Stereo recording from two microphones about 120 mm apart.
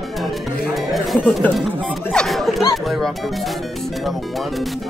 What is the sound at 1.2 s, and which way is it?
Speech, 15° left (ahead or behind).